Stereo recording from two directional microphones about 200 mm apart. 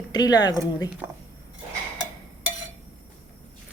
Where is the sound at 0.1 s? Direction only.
20° left (ahead or behind).